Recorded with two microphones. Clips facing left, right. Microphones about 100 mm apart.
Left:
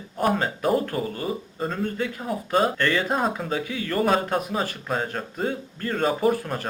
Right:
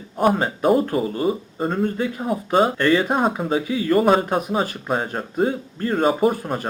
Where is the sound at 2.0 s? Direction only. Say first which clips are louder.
Right 4 dB; 20° right (ahead or behind).